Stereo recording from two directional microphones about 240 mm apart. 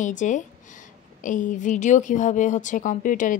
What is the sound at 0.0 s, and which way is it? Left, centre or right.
A woman's voice, left.